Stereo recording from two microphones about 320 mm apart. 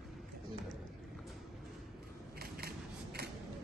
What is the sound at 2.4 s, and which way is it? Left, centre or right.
Scissors, right.